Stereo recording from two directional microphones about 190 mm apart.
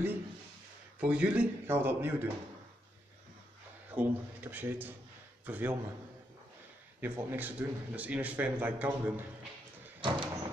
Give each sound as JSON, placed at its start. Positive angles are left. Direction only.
{"t": 0.9, "sound": "a man's voice", "side_deg": -5}
{"t": 3.9, "sound": "a man's voice", "side_deg": -10}
{"t": 7.0, "sound": "a man's voice", "side_deg": -10}
{"t": 10.0, "sound": "sliding door", "side_deg": -25}